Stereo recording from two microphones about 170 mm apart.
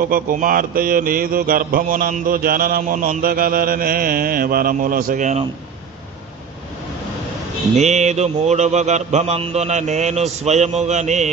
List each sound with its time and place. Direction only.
0.0 s mantra: 55° right (ahead or behind)
7.7 s a man's voice: 40° right (ahead or behind)